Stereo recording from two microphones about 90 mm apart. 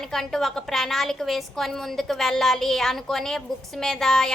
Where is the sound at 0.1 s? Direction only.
5° left (ahead or behind).